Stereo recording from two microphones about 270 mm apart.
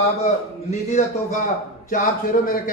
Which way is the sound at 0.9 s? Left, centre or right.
Left.